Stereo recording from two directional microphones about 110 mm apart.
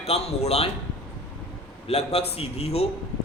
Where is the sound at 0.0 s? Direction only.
70° left (ahead or behind).